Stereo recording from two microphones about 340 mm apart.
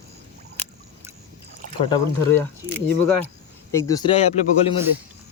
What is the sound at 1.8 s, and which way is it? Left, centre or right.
Speech, centre.